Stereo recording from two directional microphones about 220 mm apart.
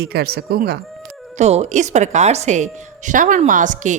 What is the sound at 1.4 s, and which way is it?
A woman's voice, 30° right (ahead or behind).